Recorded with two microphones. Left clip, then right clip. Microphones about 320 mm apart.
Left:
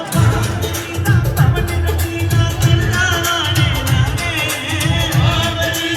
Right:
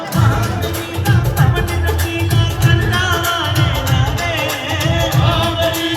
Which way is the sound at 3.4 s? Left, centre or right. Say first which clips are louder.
Even; right.